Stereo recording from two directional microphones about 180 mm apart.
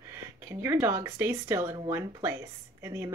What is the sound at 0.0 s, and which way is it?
Speech, 15° right (ahead or behind).